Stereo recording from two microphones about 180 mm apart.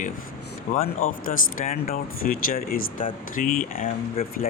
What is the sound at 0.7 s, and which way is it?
Speech, 50° left (ahead or behind).